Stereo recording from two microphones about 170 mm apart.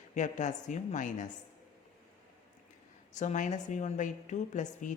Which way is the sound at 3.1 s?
45° left (ahead or behind).